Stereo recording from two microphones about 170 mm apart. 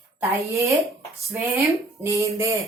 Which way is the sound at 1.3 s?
20° right (ahead or behind).